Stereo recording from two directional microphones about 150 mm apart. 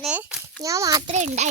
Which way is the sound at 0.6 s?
20° right (ahead or behind).